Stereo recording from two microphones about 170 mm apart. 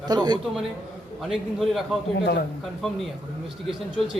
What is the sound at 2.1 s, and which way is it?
Speech, 80° left.